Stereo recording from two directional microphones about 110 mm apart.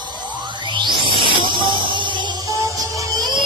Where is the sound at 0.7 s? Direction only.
45° right (ahead or behind).